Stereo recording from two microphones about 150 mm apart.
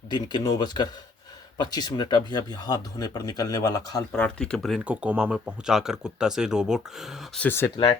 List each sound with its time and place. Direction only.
0.1 s speech: 30° left (ahead or behind)
4.2 s speech: 5° left (ahead or behind)
4.9 s speech: 10° right (ahead or behind)
7.4 s speech: 15° left (ahead or behind)